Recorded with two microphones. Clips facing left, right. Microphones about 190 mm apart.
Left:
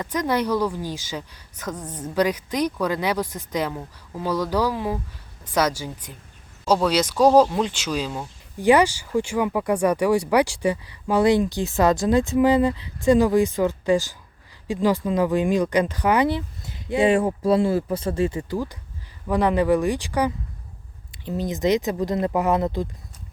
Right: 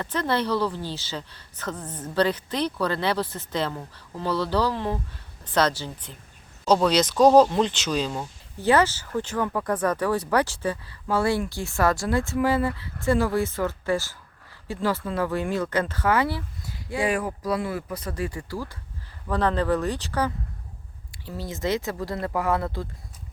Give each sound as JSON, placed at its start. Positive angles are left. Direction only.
{"t": 0.0, "sound": "speech", "side_deg": 10}